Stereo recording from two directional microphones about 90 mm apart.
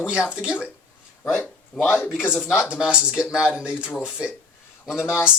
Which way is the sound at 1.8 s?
5° right (ahead or behind).